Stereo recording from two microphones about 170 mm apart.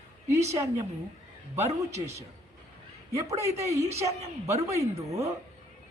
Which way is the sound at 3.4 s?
15° right (ahead or behind).